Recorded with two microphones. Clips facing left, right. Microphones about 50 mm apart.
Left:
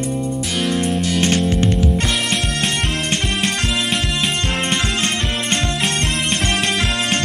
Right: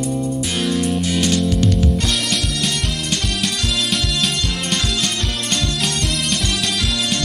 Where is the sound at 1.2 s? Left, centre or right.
Left.